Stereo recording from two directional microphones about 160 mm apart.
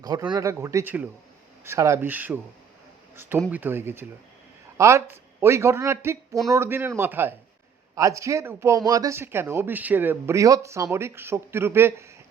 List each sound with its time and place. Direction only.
0.3 s speech: 20° right (ahead or behind)